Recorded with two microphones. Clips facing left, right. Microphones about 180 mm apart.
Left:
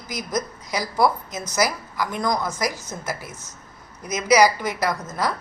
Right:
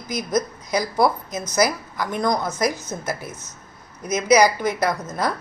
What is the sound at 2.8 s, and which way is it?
Speech, centre (ahead or behind).